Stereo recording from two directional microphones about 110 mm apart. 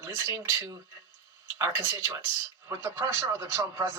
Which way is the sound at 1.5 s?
25° right (ahead or behind).